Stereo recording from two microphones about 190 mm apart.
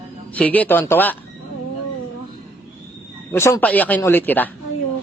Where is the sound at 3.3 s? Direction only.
10° left (ahead or behind).